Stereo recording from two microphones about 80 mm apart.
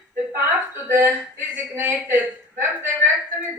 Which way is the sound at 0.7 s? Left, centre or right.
Right.